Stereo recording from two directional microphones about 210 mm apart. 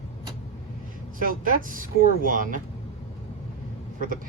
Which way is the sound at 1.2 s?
40° right (ahead or behind).